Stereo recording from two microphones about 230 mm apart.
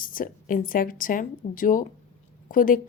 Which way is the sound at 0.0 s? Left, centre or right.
Left.